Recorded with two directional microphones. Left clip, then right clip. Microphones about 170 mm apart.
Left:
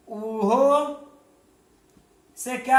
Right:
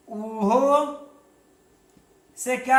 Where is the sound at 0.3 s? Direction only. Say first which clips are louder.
Even; 25° left (ahead or behind).